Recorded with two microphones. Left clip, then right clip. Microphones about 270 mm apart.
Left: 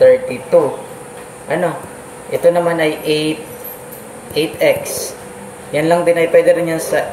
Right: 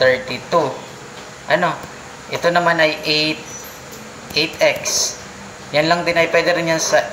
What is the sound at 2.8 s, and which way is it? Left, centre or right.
Speech, right.